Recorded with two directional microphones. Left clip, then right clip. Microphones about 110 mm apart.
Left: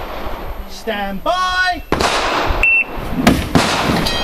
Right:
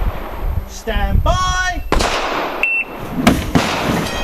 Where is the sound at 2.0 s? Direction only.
40° left (ahead or behind).